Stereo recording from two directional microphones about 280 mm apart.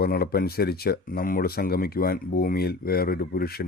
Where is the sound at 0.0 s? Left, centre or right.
Left.